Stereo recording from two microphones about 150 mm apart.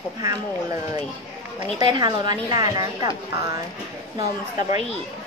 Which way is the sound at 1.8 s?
30° right (ahead or behind).